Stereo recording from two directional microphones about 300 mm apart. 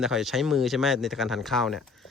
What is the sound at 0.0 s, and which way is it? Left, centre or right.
Speech, centre.